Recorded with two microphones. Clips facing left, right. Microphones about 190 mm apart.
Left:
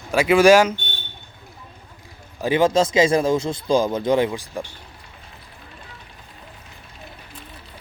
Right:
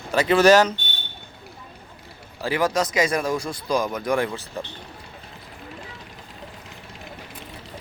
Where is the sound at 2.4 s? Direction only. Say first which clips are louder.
Left 5 dB; 25° left (ahead or behind).